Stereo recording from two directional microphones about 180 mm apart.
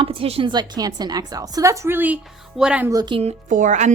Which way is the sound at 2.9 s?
25° right (ahead or behind).